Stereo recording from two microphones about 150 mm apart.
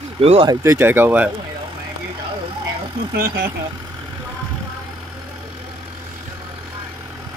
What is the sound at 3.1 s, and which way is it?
Speech, 80° right.